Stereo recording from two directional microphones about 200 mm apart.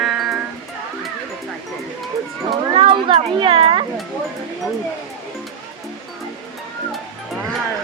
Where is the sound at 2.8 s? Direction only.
25° right (ahead or behind).